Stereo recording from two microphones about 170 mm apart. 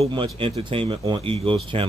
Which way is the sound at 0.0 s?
30° right (ahead or behind).